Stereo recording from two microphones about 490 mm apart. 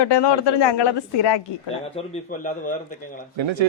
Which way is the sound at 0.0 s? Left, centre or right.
Left.